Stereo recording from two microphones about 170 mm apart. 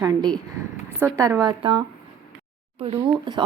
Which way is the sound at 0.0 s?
20° right (ahead or behind).